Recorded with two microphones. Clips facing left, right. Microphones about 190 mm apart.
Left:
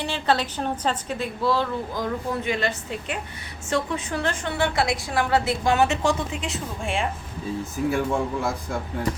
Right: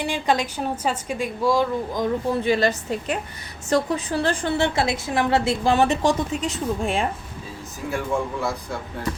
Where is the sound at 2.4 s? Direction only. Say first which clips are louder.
Right 5 dB; 35° right (ahead or behind).